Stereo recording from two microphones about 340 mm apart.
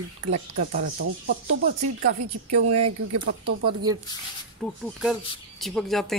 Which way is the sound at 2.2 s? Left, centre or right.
Right.